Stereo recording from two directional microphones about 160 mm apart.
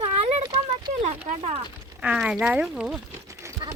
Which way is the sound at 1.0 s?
40° right (ahead or behind).